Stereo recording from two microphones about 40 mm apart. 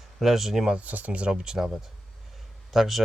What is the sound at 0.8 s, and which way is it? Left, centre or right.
Speech, right.